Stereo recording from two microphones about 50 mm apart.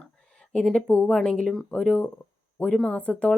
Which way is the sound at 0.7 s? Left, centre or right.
Left.